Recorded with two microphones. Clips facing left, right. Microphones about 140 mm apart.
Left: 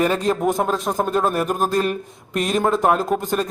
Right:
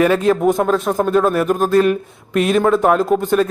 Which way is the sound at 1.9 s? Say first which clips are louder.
Right 7 dB; 40° left (ahead or behind).